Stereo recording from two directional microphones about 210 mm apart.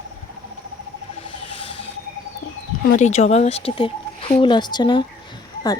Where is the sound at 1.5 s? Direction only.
25° left (ahead or behind).